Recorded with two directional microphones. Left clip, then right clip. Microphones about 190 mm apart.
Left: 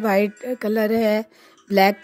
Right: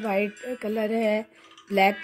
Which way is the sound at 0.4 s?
30° left (ahead or behind).